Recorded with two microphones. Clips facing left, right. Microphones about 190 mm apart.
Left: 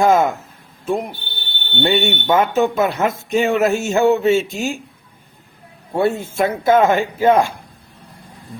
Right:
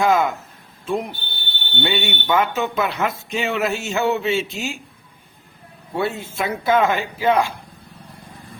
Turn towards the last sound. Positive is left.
turn(degrees=45)  # may be behind; listen again after turning